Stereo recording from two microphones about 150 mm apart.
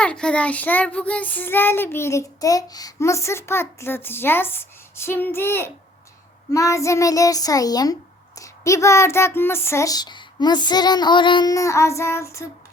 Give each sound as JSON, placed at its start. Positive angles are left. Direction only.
{"t": 0.0, "sound": "child singing", "side_deg": 5}
{"t": 6.5, "sound": "a child's voice", "side_deg": 20}